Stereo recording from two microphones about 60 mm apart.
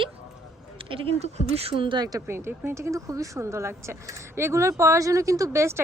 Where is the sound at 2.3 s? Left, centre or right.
Right.